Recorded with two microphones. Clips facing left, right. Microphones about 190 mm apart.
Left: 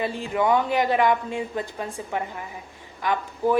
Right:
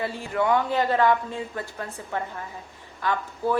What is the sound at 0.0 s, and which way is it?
A woman's voice, 15° left (ahead or behind).